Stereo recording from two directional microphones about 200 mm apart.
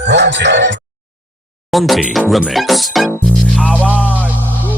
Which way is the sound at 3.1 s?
5° left (ahead or behind).